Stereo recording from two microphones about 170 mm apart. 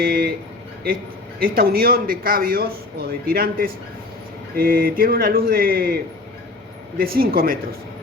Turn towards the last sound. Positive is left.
turn(degrees=-60)  # may be behind; listen again after turning